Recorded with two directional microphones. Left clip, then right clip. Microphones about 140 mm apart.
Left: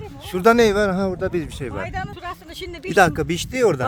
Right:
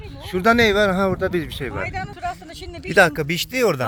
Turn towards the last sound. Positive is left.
turn(degrees=15)  # may be behind; listen again after turning